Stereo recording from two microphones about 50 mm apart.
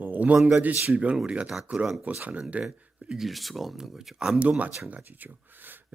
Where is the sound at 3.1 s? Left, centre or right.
Centre.